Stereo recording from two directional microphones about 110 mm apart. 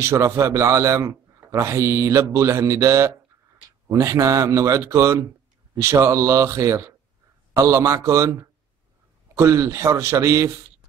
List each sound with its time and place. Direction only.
0.0 s a man's voice: 25° right (ahead or behind)